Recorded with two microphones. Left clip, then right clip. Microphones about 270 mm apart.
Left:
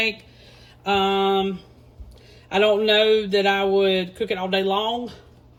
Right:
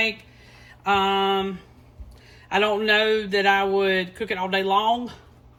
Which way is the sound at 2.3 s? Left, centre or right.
Centre.